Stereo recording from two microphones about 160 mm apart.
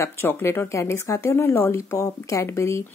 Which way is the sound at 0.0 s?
15° left (ahead or behind).